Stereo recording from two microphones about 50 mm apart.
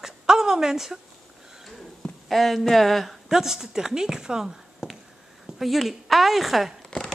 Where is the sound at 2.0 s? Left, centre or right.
Centre.